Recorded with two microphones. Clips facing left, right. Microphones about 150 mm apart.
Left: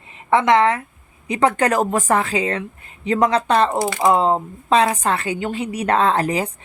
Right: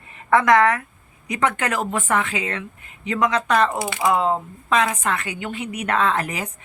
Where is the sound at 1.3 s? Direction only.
35° left (ahead or behind).